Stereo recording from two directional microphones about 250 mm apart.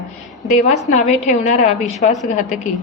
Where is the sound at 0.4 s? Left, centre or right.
Left.